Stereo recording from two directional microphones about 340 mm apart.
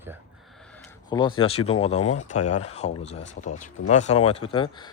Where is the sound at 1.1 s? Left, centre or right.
Centre.